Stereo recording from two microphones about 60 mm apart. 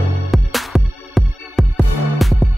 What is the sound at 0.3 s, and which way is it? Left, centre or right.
Music, centre.